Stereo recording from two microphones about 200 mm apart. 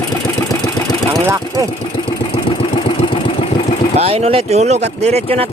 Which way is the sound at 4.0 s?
30° right (ahead or behind).